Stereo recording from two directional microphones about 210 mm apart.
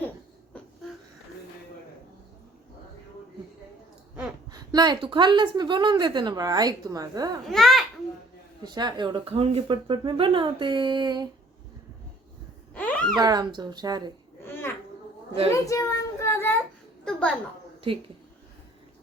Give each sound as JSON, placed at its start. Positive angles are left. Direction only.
{"t": 4.4, "sound": "a woman's voice", "side_deg": -20}
{"t": 7.4, "sound": "a child's voice", "side_deg": 0}
{"t": 8.6, "sound": "a woman's voice", "side_deg": -20}
{"t": 12.7, "sound": "a sound", "side_deg": 5}
{"t": 13.1, "sound": "a woman's voice", "side_deg": -20}
{"t": 14.4, "sound": "a sound", "side_deg": 10}
{"t": 15.5, "sound": "child singing", "side_deg": 15}
{"t": 17.1, "sound": "a sound", "side_deg": 5}
{"t": 17.9, "sound": "a woman's voice", "side_deg": -25}